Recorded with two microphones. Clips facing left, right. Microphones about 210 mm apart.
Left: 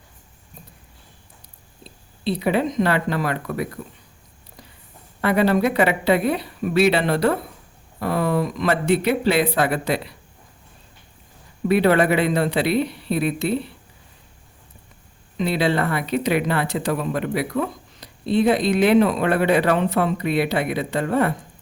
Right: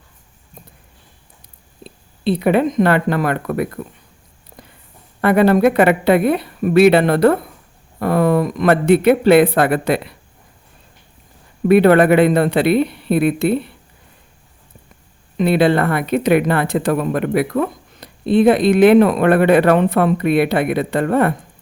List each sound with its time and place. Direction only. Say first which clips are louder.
1.8 s speech: right 5 dB; 55° right (ahead or behind)
5.2 s speech: right 6 dB; 55° right (ahead or behind)
11.7 s speech: right 7 dB; 55° right (ahead or behind)
15.4 s speech: right 7 dB; 55° right (ahead or behind)